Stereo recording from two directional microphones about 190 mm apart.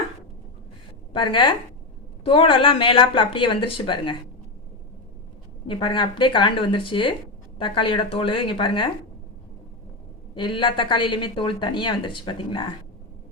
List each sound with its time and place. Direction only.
1.1 s a woman's voice: 25° left (ahead or behind)
5.6 s a woman's voice: 25° left (ahead or behind)
10.3 s a woman's voice: 25° left (ahead or behind)